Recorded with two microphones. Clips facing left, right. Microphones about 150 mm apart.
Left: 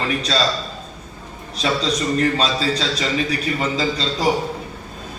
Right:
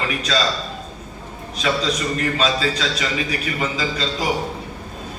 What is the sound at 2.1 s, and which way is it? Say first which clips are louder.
A man's voice: left 2 dB; 35° left (ahead or behind).